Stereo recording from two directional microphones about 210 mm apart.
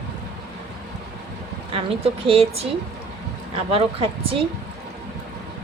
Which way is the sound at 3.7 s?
25° right (ahead or behind).